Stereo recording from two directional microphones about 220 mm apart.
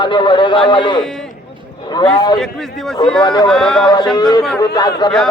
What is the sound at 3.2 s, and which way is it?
Speech, 20° left (ahead or behind).